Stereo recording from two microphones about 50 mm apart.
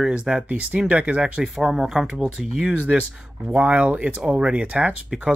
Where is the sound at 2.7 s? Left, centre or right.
Right.